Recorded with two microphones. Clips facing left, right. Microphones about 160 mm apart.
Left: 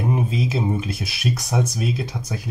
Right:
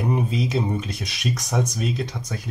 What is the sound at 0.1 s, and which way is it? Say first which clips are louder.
Speech: right 1 dB; 5° left (ahead or behind).